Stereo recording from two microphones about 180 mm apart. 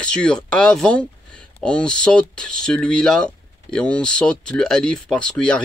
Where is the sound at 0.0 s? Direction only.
5° left (ahead or behind).